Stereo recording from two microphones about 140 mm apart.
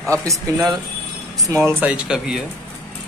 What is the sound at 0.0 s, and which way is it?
Speech, 20° right (ahead or behind).